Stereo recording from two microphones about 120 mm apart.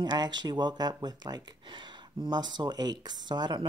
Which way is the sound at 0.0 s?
35° right (ahead or behind).